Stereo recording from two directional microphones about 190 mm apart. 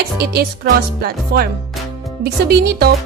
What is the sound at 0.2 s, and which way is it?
A child's voice, 55° right (ahead or behind).